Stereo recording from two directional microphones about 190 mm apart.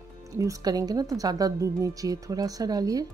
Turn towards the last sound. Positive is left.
turn(degrees=-20)  # may be behind; listen again after turning